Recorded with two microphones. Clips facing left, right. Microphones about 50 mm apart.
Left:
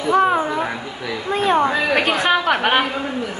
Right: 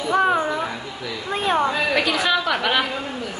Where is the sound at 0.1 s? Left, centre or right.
Centre.